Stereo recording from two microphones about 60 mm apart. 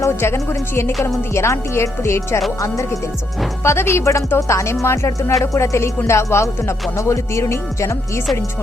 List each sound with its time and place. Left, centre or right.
0.0 s speech: left
2.6 s speech: left
3.6 s speech: left